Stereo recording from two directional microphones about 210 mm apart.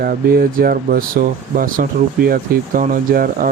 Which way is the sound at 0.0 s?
45° right (ahead or behind).